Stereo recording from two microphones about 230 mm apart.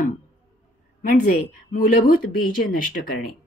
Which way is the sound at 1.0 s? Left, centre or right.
Left.